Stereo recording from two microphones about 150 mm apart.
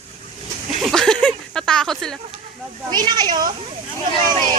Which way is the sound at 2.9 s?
30° right (ahead or behind).